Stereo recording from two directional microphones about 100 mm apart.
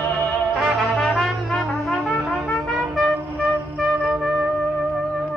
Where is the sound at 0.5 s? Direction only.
5° left (ahead or behind).